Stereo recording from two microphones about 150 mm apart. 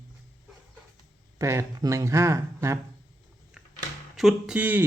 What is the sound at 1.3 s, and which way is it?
Speech, 20° right (ahead or behind).